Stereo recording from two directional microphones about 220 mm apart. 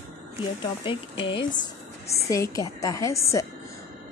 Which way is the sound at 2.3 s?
15° left (ahead or behind).